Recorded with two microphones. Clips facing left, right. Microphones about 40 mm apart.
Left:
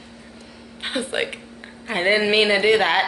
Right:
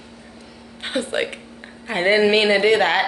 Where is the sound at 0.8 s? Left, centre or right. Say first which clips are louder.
Right 1 dB; centre.